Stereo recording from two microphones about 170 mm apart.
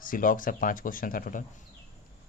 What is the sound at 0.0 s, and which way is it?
Speech, 55° left (ahead or behind).